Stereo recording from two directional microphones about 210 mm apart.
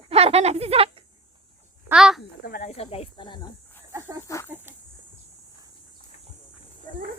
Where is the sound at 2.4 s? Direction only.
45° left (ahead or behind).